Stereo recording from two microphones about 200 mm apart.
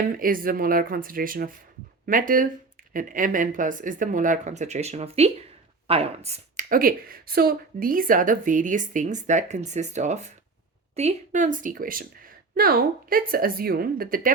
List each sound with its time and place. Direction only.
0.2 s a woman's voice: 45° right (ahead or behind)